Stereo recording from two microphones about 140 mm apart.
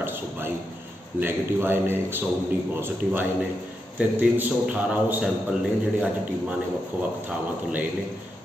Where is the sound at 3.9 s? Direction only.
15° right (ahead or behind).